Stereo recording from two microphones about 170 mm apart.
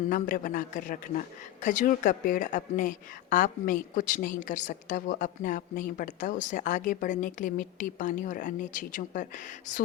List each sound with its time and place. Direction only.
0.1 s a woman's voice: 50° left (ahead or behind)